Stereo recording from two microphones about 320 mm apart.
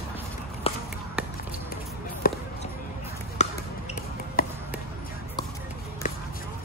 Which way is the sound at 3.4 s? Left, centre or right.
Left.